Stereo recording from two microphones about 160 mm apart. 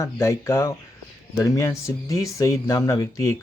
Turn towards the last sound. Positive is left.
turn(degrees=20)  # may be behind; listen again after turning